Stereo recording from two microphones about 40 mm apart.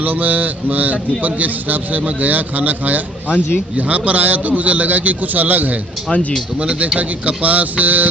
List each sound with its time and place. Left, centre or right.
0.0 s mantra: right
3.3 s speech: left
3.7 s a man's voice: right
7.0 s a man's voice: right